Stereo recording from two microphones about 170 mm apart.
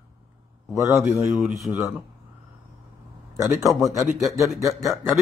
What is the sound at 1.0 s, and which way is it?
Speech, 5° right (ahead or behind).